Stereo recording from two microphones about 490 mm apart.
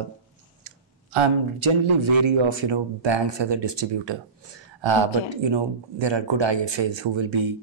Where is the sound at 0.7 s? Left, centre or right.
Right.